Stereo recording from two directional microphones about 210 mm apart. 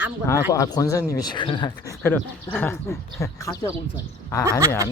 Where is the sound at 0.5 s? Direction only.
15° left (ahead or behind).